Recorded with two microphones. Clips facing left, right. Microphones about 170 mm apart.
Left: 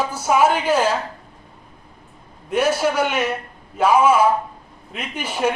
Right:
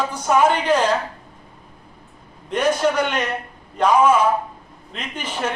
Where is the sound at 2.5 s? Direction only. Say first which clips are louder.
Even; 5° left (ahead or behind).